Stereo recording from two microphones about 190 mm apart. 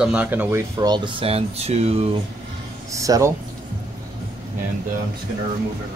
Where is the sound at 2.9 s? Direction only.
15° right (ahead or behind).